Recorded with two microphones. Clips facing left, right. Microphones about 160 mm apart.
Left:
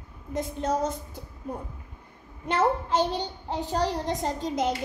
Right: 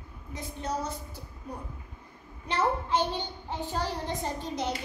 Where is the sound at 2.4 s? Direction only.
45° left (ahead or behind).